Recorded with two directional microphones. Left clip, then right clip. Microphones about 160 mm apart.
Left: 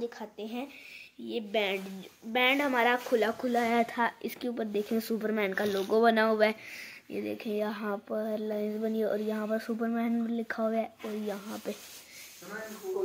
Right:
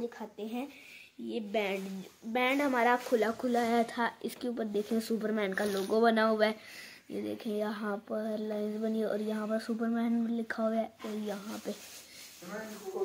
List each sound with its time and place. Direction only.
0.2 s a woman's voice: 10° left (ahead or behind)